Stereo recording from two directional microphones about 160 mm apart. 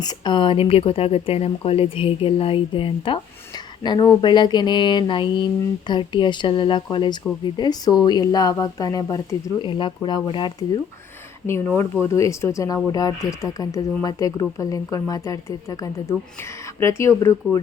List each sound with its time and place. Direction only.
0.0 s a woman's voice: 25° left (ahead or behind)
11.4 s a woman's voice: 15° left (ahead or behind)